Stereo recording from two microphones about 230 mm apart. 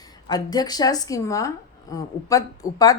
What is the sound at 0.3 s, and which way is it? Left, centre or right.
Speech, centre.